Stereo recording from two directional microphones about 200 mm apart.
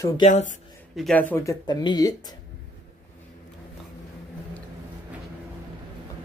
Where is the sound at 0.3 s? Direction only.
40° left (ahead or behind).